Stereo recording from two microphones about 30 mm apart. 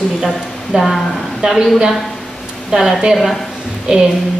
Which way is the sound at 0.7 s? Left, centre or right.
Right.